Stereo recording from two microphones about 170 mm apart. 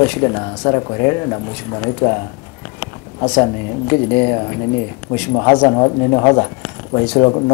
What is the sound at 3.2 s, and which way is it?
Speech, 25° left (ahead or behind).